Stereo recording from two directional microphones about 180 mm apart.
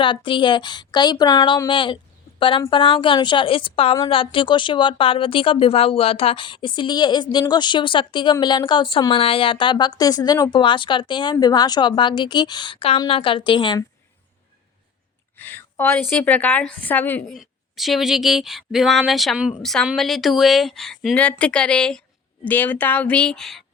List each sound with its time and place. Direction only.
0.0 s speech: 25° left (ahead or behind)
15.4 s a woman's voice: 10° left (ahead or behind)
17.3 s a woman's voice: centre (ahead or behind)